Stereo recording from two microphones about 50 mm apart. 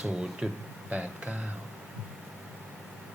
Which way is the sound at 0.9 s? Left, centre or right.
Right.